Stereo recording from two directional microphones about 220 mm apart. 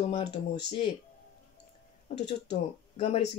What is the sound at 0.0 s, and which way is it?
Speech, 25° left (ahead or behind).